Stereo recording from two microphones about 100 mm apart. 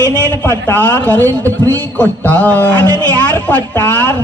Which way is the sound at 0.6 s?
20° left (ahead or behind).